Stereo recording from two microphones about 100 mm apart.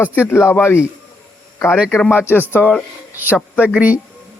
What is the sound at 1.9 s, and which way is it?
Speech, 15° left (ahead or behind).